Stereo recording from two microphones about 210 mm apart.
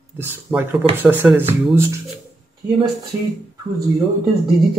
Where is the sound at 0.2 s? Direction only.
10° right (ahead or behind).